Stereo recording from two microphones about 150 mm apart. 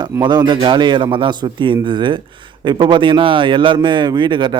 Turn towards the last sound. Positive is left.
turn(degrees=-30)  # may be behind; listen again after turning